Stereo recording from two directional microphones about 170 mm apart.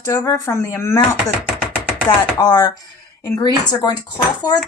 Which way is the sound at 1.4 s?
10° right (ahead or behind).